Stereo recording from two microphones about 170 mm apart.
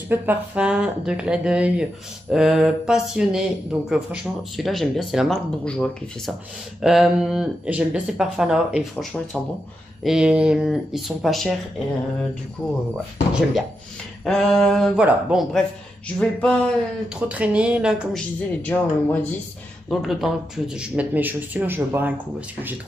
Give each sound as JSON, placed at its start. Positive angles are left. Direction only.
{"t": 0.1, "sound": "speech", "side_deg": -10}
{"t": 12.6, "sound": "speech", "side_deg": 0}
{"t": 16.2, "sound": "speech", "side_deg": 5}
{"t": 17.3, "sound": "speech", "side_deg": -10}
{"t": 18.6, "sound": "speech", "side_deg": 10}
{"t": 19.9, "sound": "speech", "side_deg": 0}